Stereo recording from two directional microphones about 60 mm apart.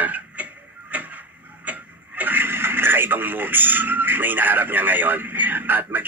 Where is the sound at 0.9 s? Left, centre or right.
Right.